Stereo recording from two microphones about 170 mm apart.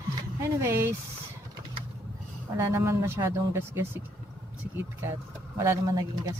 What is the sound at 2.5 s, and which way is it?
Speech, 15° right (ahead or behind).